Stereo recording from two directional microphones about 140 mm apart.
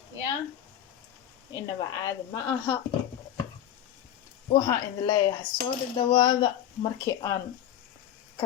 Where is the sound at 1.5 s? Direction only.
25° left (ahead or behind).